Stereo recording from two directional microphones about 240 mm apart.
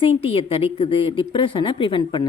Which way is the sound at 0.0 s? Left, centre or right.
Left.